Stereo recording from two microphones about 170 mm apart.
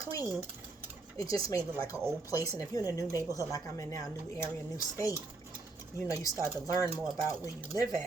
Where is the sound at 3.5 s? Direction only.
15° left (ahead or behind).